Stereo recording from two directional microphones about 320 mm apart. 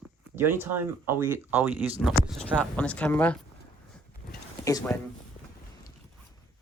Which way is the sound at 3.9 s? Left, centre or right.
Centre.